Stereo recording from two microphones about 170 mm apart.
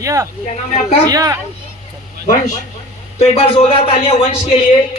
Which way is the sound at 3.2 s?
35° left (ahead or behind).